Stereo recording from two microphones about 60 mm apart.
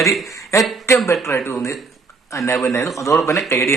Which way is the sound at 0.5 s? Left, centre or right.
Left.